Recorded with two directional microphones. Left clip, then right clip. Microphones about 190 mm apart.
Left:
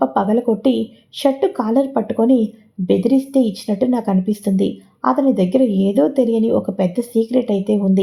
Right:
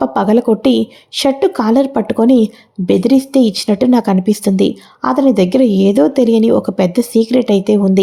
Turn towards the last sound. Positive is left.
turn(degrees=-30)  # may be behind; listen again after turning